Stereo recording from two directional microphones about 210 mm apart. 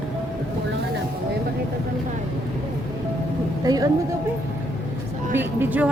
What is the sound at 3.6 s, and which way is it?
Speech, 15° right (ahead or behind).